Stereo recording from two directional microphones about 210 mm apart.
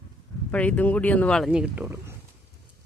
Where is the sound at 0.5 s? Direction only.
5° left (ahead or behind); by 2.1 s 10° right (ahead or behind).